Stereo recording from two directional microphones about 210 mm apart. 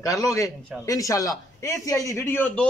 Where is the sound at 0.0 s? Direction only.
15° left (ahead or behind).